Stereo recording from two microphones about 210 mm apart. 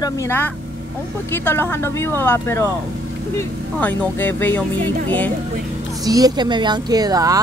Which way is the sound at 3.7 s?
10° left (ahead or behind).